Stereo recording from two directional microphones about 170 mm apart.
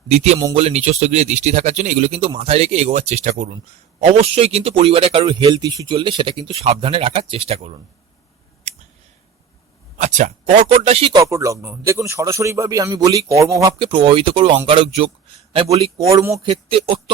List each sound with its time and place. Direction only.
0.5 s speech: 35° right (ahead or behind)
10.0 s speech: 45° right (ahead or behind)
11.1 s a man's voice: 20° right (ahead or behind)
16.0 s a man's voice: 20° right (ahead or behind)
16.5 s speech: 35° right (ahead or behind)